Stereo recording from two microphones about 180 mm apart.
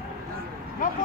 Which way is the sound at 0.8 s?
50° left (ahead or behind).